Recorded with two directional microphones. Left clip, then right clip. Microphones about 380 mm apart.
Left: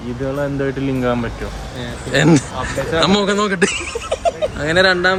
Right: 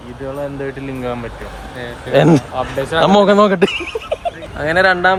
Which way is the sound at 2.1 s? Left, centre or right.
Centre.